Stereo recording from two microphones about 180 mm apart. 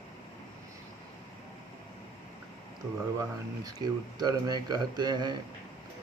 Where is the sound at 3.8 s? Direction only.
20° right (ahead or behind).